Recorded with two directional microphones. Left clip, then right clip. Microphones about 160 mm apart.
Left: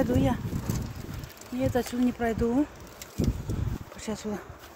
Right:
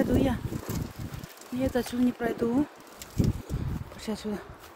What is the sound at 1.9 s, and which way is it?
Speech, 5° right (ahead or behind).